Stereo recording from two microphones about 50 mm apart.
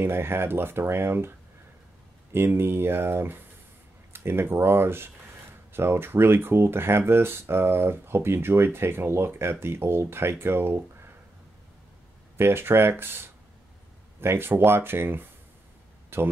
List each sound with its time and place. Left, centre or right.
0.0 s speech: right
2.3 s speech: right
12.4 s speech: right